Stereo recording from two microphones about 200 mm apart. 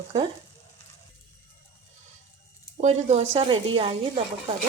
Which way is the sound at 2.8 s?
35° right (ahead or behind).